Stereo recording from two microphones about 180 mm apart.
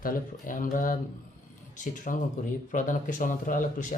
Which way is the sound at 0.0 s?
50° left (ahead or behind).